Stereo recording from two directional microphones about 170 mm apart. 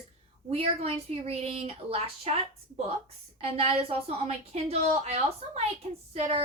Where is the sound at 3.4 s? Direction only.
35° right (ahead or behind).